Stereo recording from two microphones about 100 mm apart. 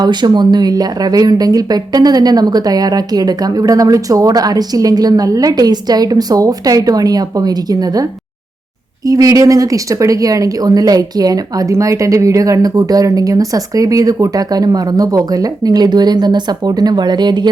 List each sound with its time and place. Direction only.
0.0 s a woman's voice: 45° right (ahead or behind)
9.0 s a woman's voice: 35° right (ahead or behind)